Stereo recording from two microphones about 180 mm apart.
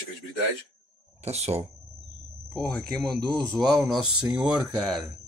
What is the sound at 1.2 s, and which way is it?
Speech, 35° right (ahead or behind).